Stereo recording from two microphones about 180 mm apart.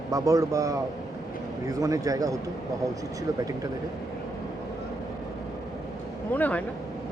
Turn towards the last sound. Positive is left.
turn(degrees=10)  # may be behind; listen again after turning